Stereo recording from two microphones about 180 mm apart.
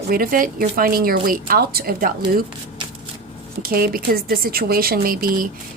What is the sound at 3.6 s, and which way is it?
A woman's voice, 55° right (ahead or behind).